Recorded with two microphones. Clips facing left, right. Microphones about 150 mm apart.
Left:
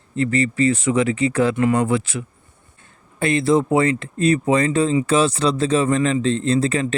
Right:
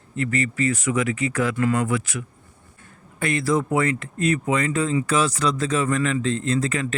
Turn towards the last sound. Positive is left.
turn(degrees=30)  # may be behind; listen again after turning